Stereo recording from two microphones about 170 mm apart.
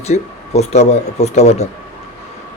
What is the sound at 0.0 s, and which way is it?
Speech, 40° left (ahead or behind).